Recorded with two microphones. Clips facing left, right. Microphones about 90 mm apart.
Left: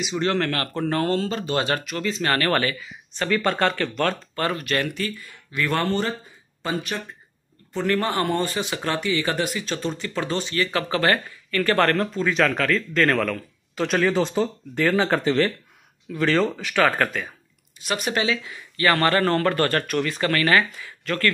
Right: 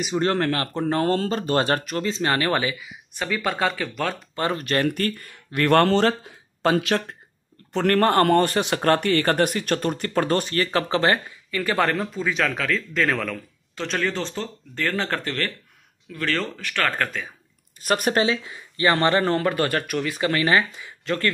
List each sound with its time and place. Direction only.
0.2 s speech: 30° right (ahead or behind)
1.1 s speech: 40° right (ahead or behind); by 4.2 s 5° right (ahead or behind)
4.4 s speech: 30° right (ahead or behind)
4.9 s speech: 55° right (ahead or behind); by 7.2 s 90° right
7.7 s speech: 60° right (ahead or behind); by 17.3 s 5° left (ahead or behind)
17.7 s speech: 45° right (ahead or behind); by 21.3 s 20° right (ahead or behind)